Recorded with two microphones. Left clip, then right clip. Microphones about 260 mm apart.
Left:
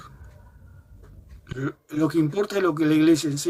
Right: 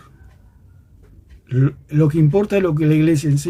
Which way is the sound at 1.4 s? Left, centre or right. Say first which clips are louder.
Right 8 dB; centre.